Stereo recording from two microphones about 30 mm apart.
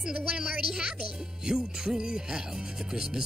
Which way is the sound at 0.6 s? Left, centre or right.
Right.